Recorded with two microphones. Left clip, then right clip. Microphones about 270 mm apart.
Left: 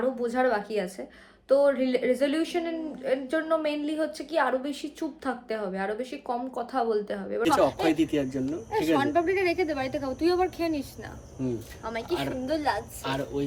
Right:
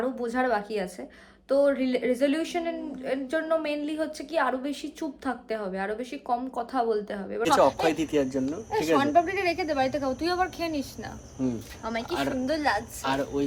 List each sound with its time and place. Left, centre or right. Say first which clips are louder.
0.0 s a woman's voice: left 2 dB; centre
9.0 s a woman's voice: right 3 dB; centre
12.0 s a woman's voice: right 1 dB; centre